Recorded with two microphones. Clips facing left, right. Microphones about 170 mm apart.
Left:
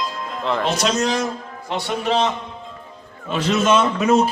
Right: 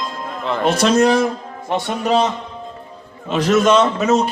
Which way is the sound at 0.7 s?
55° right (ahead or behind).